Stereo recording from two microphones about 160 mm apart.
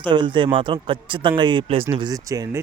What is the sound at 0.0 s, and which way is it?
Speech, 30° right (ahead or behind).